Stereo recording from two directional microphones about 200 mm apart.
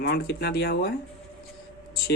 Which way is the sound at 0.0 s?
55° left (ahead or behind).